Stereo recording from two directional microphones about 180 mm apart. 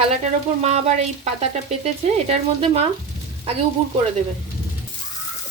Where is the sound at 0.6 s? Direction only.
40° right (ahead or behind).